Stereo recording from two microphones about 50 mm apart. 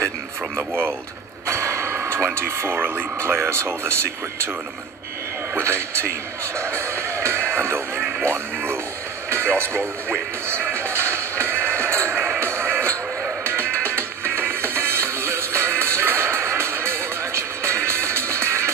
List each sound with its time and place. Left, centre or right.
0.6 s speech: right
1.5 s a sound: right
3.2 s speech: right
5.9 s music: right
9.3 s speech: right
10.4 s music: right